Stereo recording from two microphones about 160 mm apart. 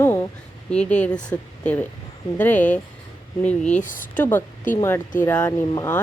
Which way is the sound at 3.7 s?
55° left (ahead or behind).